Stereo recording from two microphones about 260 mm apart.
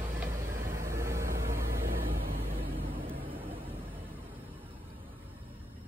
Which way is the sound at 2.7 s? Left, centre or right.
Right.